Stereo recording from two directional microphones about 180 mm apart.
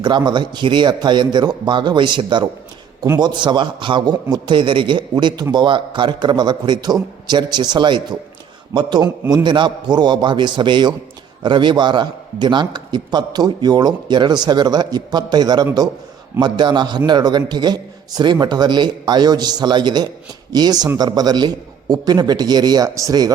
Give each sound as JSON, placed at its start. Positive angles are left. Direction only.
{"t": 0.0, "sound": "a man's voice", "side_deg": -25}